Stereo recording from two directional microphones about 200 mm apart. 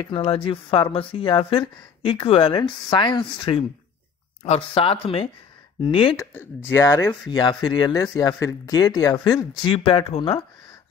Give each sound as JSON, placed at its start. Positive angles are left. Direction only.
{"t": 0.0, "sound": "speech", "side_deg": 25}
{"t": 6.1, "sound": "speech", "side_deg": 10}